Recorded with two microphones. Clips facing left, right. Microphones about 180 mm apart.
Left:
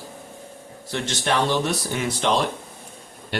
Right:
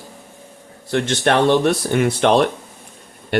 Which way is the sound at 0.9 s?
60° right (ahead or behind).